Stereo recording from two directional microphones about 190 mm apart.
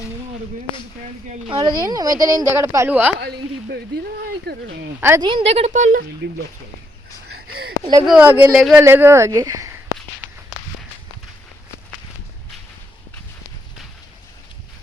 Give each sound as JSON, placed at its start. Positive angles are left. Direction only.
{"t": 1.5, "sound": "a woman's voice", "side_deg": -25}
{"t": 3.2, "sound": "speech", "side_deg": -60}
{"t": 4.9, "sound": "speech", "side_deg": -10}
{"t": 5.2, "sound": "speech", "side_deg": -30}
{"t": 6.2, "sound": "speech", "side_deg": -65}
{"t": 8.0, "sound": "speech", "side_deg": -5}